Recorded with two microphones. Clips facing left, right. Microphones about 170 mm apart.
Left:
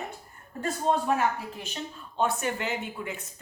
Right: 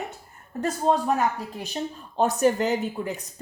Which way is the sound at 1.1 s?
40° right (ahead or behind).